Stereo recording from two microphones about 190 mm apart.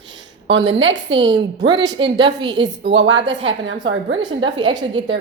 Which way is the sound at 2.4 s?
70° right (ahead or behind).